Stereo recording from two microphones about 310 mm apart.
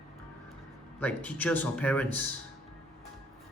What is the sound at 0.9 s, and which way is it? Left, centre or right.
Speech, centre.